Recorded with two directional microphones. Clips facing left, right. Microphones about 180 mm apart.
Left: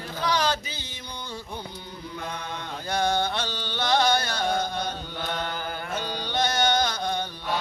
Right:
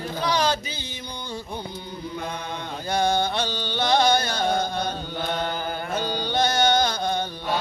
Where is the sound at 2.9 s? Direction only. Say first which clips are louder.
Right 2 dB; 10° right (ahead or behind).